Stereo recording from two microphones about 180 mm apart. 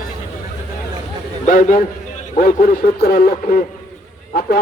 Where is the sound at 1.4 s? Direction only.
50° left (ahead or behind).